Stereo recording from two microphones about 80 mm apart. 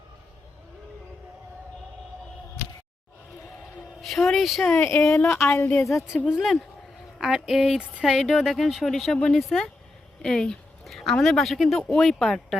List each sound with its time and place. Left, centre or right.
4.0 s a woman's voice: centre
4.8 s a woman's voice: left
6.1 s a woman's voice: centre